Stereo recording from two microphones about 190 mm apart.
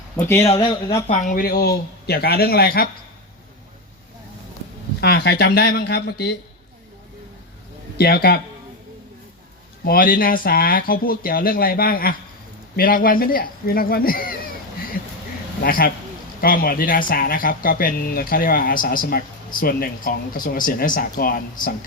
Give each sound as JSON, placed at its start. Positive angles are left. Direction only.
{"t": 0.2, "sound": "speech", "side_deg": 15}
{"t": 0.5, "sound": "speech", "side_deg": 25}
{"t": 1.3, "sound": "speech", "side_deg": 50}
{"t": 4.9, "sound": "speech", "side_deg": 55}
{"t": 7.9, "sound": "speech", "side_deg": 55}
{"t": 9.8, "sound": "speech", "side_deg": 50}
{"t": 15.6, "sound": "speech", "side_deg": 50}